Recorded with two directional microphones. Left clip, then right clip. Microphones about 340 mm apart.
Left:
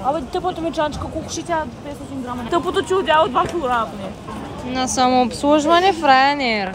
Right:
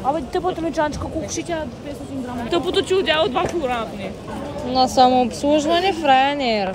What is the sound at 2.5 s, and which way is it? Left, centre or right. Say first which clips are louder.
A woman's voice: even; centre.